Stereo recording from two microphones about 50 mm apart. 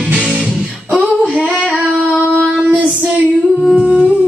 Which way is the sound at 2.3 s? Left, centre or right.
Right.